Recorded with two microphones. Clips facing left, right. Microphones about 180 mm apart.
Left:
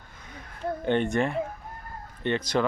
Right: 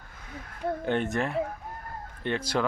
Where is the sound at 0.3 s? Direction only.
5° right (ahead or behind).